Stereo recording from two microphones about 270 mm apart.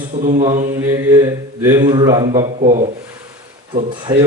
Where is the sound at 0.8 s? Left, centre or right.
Centre.